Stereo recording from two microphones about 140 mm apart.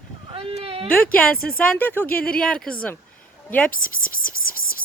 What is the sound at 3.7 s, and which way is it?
Whispering, 80° left.